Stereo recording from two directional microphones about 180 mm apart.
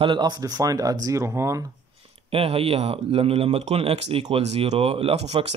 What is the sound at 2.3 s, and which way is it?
Speech, 35° right (ahead or behind).